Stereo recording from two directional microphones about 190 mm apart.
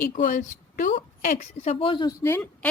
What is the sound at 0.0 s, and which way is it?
A woman's voice, 45° left (ahead or behind).